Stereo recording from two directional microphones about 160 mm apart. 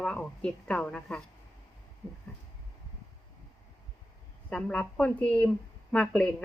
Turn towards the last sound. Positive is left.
turn(degrees=5)  # may be behind; listen again after turning